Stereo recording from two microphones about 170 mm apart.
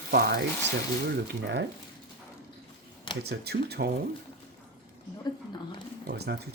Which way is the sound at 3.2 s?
70° right (ahead or behind).